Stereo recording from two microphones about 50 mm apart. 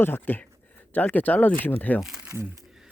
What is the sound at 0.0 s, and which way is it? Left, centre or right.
Speech, left.